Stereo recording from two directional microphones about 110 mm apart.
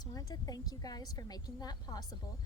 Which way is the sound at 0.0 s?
35° left (ahead or behind).